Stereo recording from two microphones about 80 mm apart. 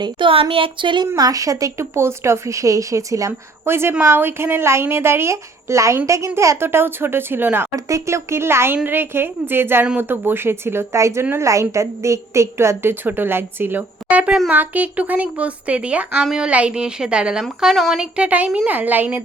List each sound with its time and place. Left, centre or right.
0.0 s speech: right
1.1 s speech: right
3.7 s a woman's voice: right
7.9 s a woman's voice: right; by 17.4 s centre
17.6 s speech: centre; by 19.2 s right